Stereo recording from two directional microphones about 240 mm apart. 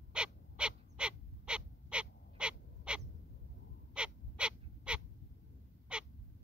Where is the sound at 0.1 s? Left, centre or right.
Centre.